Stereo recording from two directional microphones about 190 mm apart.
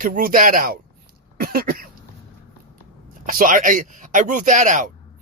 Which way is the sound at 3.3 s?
45° right (ahead or behind).